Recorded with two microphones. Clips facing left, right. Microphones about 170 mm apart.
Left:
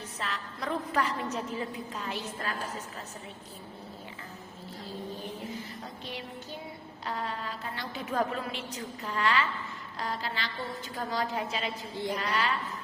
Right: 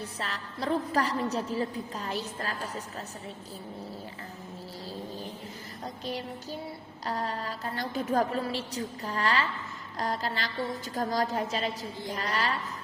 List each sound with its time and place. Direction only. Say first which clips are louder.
0.0 s a woman's voice: right 1 dB; 35° right (ahead or behind)
6.1 s a woman's voice: right 6 dB; 40° right (ahead or behind)